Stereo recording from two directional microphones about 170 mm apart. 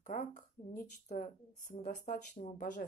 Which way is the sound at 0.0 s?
45° left (ahead or behind).